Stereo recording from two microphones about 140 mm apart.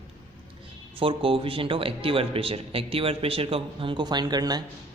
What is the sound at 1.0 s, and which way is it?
A man's voice, 40° right (ahead or behind).